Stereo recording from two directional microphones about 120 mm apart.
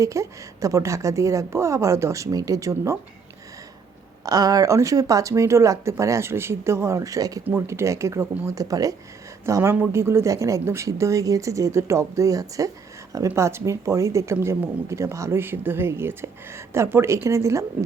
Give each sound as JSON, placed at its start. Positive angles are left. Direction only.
{"t": 0.0, "sound": "speech", "side_deg": -25}
{"t": 4.3, "sound": "speech", "side_deg": -30}